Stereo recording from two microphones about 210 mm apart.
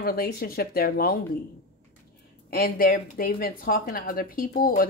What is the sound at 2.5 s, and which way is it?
A woman's voice, 45° left (ahead or behind).